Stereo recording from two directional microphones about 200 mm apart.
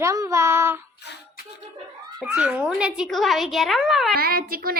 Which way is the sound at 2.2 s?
5° right (ahead or behind).